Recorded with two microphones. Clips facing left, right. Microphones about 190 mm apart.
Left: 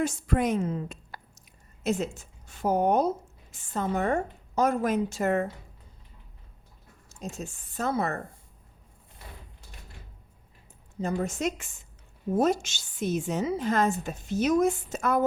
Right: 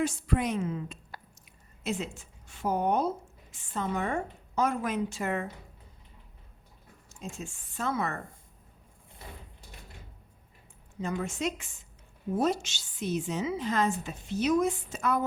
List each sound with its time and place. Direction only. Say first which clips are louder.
0.0 s a woman's voice: left 2 dB; 45° left (ahead or behind)
7.1 s a woman's voice: left 3 dB; 40° left (ahead or behind)
11.0 s a woman's voice: left 3 dB; 40° left (ahead or behind)